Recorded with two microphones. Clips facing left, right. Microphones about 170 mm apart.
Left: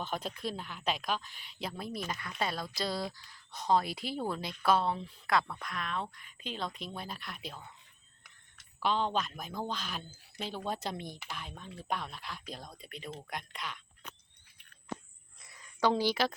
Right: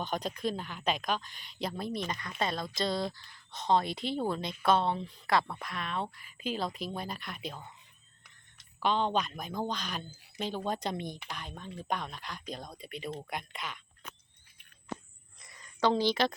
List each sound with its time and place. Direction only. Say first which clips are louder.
0.0 s speech: right 3 dB; 5° left (ahead or behind)
8.8 s speech: right 2 dB; 5° left (ahead or behind)
15.4 s a sound: right 1 dB; 5° left (ahead or behind)